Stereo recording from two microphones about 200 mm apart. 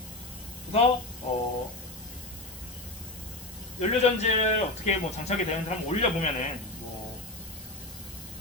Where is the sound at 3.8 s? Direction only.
35° left (ahead or behind).